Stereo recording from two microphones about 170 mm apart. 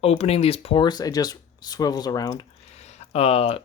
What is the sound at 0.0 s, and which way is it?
Speech, 35° left (ahead or behind).